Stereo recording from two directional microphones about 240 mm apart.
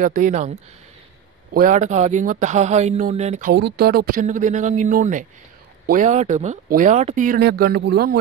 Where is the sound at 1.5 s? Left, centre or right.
Right.